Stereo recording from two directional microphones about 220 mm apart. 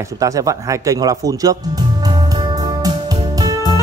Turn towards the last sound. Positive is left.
turn(degrees=-15)  # may be behind; listen again after turning